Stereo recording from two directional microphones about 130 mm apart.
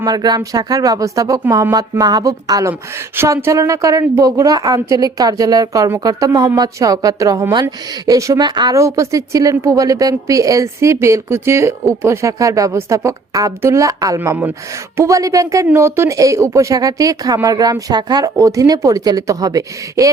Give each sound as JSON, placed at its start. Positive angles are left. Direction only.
{"t": 0.0, "sound": "speech", "side_deg": -30}
{"t": 14.2, "sound": "speech", "side_deg": -15}
{"t": 14.9, "sound": "speech", "side_deg": -25}